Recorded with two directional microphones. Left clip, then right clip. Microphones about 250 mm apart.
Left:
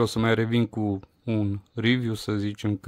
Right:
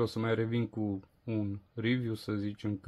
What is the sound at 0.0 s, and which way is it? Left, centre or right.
Speech, left.